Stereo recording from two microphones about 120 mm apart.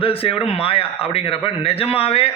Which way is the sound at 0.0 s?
50° left (ahead or behind).